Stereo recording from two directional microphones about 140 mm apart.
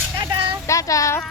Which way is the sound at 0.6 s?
20° left (ahead or behind).